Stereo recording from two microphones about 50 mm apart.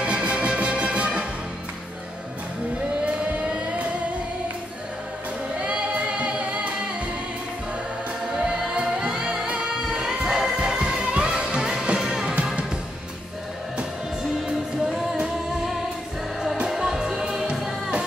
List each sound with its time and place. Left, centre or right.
0.0 s music: right
3.2 s vehicle: right
5.6 s singing: right
8.3 s music: centre
14.8 s music: centre